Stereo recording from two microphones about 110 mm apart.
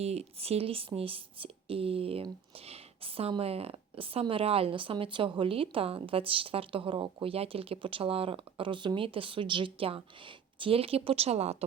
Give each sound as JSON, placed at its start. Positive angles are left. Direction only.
{"t": 0.0, "sound": "a woman's voice", "side_deg": -70}